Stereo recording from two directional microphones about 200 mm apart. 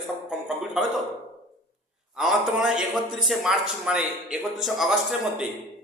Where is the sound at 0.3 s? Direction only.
5° right (ahead or behind).